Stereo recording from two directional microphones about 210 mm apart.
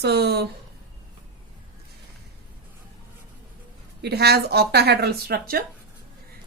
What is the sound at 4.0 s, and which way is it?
A woman's voice, 50° right (ahead or behind).